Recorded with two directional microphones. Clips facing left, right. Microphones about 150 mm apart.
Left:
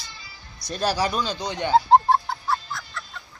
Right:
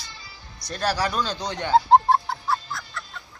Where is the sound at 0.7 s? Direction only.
20° left (ahead or behind).